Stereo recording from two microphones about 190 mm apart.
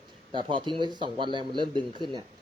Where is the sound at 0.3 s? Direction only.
25° right (ahead or behind).